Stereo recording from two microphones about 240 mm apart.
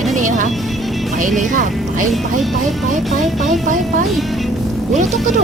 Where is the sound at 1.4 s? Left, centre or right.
Right.